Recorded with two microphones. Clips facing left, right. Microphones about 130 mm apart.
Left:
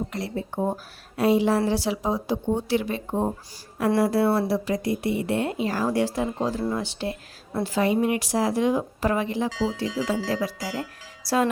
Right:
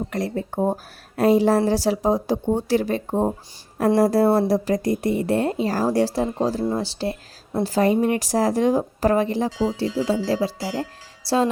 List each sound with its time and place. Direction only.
0.1 s a woman's voice: 45° right (ahead or behind); by 11.4 s 30° right (ahead or behind)